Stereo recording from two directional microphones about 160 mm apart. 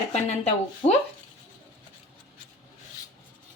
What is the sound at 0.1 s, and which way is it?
Speech, 45° left (ahead or behind).